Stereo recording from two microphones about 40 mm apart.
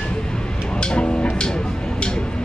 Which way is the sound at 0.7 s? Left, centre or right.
Left.